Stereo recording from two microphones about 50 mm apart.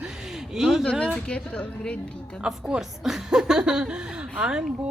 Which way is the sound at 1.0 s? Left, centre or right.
Left.